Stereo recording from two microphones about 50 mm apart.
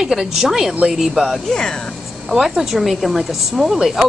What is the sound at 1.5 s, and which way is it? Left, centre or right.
Speech, centre.